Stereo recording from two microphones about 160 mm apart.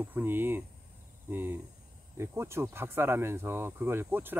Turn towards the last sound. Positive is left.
turn(degrees=-10)  # may be behind; listen again after turning